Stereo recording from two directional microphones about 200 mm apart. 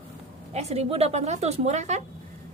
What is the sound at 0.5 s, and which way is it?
A woman's voice, 30° right (ahead or behind).